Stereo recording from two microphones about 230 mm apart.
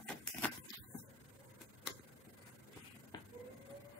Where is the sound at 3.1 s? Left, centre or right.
Centre.